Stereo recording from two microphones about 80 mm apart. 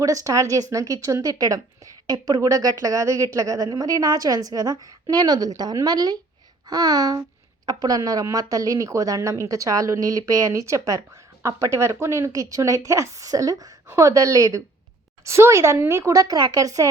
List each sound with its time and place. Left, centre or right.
0.0 s a woman's voice: right